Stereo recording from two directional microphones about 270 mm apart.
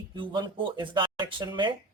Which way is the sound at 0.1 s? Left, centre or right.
Centre.